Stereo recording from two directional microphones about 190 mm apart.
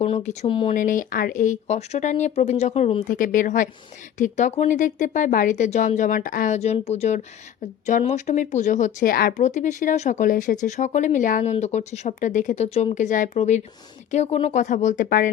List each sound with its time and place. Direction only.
0.0 s speech: 35° left (ahead or behind)
0.7 s speech: 45° left (ahead or behind)
3.2 s speech: 45° left (ahead or behind)